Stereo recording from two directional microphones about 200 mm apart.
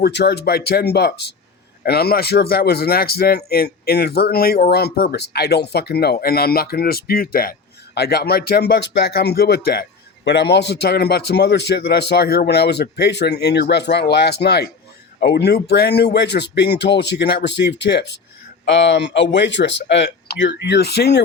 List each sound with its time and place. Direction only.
0.0 s a man's voice: 55° left (ahead or behind)